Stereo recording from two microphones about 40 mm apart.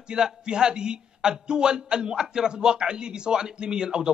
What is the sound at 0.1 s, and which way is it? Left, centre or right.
A man's voice, centre.